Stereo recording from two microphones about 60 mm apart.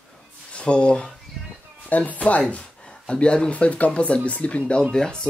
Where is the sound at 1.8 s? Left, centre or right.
Left.